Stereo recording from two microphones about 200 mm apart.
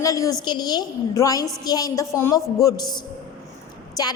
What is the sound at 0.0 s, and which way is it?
A woman's voice, 15° left (ahead or behind).